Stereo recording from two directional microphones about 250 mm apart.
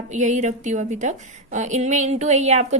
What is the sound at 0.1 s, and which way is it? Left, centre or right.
A woman's voice, right.